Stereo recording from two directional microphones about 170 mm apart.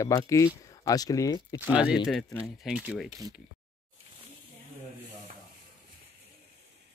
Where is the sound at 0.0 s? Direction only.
20° left (ahead or behind).